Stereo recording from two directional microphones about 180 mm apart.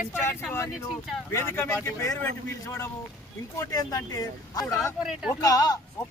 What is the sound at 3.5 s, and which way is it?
Speech, 20° left (ahead or behind).